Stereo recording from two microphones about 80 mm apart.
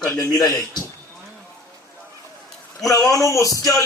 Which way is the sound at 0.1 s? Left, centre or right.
Left.